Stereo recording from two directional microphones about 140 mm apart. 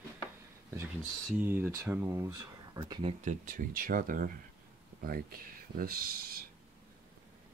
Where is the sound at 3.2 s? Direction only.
70° right (ahead or behind).